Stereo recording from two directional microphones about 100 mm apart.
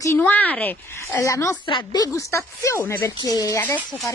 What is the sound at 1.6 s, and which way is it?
Speech, 55° left (ahead or behind).